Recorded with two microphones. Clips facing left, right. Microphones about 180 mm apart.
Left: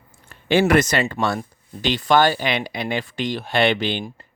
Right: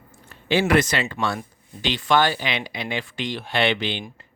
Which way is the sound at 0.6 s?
45° left (ahead or behind).